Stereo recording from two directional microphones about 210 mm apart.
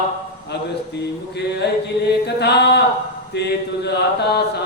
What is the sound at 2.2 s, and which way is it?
Chant, 50° left (ahead or behind).